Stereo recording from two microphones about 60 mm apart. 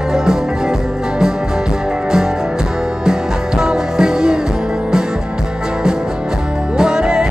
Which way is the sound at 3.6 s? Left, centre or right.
Centre.